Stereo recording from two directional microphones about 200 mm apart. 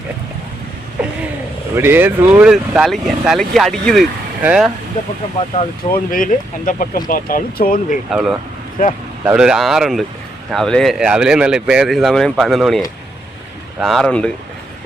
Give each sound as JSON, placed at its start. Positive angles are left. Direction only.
{"t": 1.7, "sound": "speech", "side_deg": -10}
{"t": 5.9, "sound": "speech", "side_deg": 45}
{"t": 8.1, "sound": "speech", "side_deg": -5}
{"t": 8.8, "sound": "speech", "side_deg": 45}
{"t": 9.2, "sound": "speech", "side_deg": -5}